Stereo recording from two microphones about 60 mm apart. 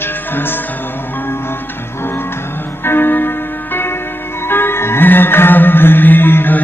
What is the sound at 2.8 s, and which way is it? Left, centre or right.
Music, left.